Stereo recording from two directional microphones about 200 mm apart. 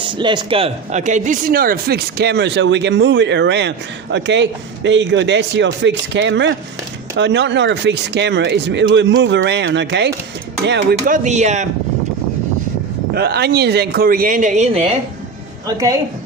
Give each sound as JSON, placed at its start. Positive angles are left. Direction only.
{"t": 0.0, "sound": "speech", "side_deg": -25}
{"t": 11.0, "sound": "speech", "side_deg": -40}
{"t": 13.1, "sound": "a man's voice", "side_deg": -55}
{"t": 15.6, "sound": "speech", "side_deg": -20}